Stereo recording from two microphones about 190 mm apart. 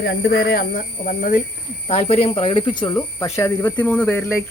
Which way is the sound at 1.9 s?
30° left (ahead or behind).